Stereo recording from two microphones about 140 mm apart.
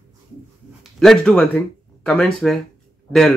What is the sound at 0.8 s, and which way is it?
Speech, 5° left (ahead or behind).